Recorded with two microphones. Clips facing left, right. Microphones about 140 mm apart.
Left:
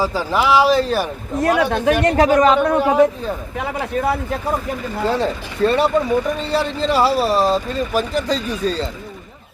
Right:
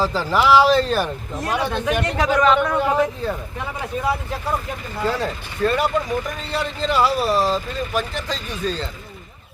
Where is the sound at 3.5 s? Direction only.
85° left; by 4.3 s 55° left (ahead or behind).